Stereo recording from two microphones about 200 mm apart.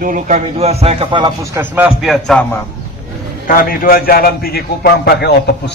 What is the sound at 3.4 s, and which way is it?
A man's voice, 45° left (ahead or behind).